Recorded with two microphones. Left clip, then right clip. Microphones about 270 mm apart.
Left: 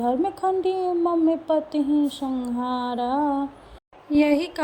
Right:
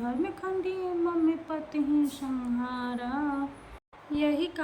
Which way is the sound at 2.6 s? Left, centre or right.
Centre.